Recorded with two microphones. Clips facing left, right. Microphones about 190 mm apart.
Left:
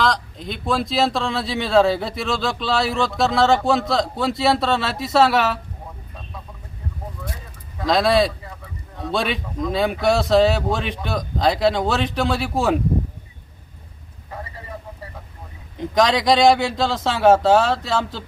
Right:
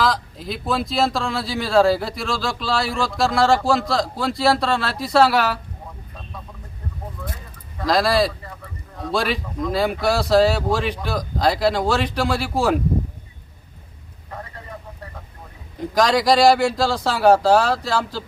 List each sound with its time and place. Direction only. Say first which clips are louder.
0.0 s speech: even; 5° right (ahead or behind)
7.8 s speech: left 1 dB; centre (ahead or behind)
14.3 s a sound: left 1 dB; 5° left (ahead or behind)
15.8 s speech: even; centre (ahead or behind)